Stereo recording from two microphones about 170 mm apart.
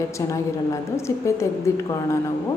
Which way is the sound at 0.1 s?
20° left (ahead or behind).